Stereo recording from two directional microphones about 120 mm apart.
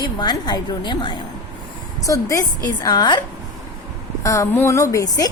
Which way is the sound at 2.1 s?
25° left (ahead or behind).